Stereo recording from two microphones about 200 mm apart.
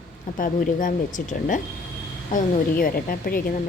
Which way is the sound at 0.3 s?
40° left (ahead or behind).